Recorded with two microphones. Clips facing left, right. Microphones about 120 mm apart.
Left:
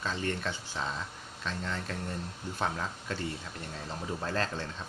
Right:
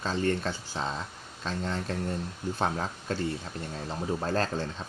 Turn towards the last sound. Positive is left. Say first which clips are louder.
# right 4 dB
turn(degrees=-35)  # may be behind; listen again after turning